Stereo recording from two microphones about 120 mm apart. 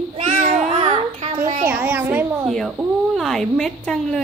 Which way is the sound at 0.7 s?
55° right (ahead or behind).